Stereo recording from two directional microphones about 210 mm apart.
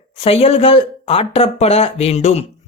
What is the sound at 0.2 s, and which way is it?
Speech, 30° left (ahead or behind).